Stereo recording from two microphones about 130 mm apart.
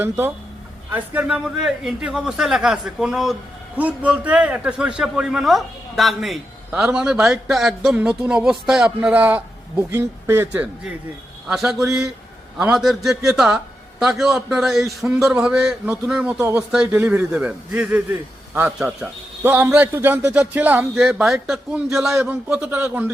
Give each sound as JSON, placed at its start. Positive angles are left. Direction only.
{"t": 0.0, "sound": "a man's voice", "side_deg": -15}
{"t": 16.4, "sound": "a man's voice", "side_deg": -20}